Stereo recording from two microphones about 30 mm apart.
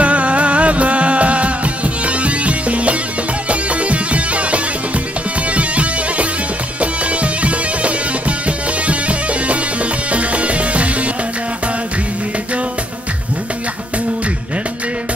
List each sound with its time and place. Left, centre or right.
0.0 s music: right